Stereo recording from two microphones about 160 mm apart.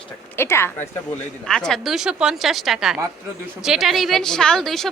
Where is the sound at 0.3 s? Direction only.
15° left (ahead or behind).